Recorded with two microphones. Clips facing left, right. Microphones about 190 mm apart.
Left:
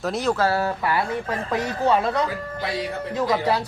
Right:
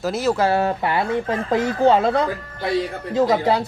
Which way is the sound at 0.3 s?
20° right (ahead or behind).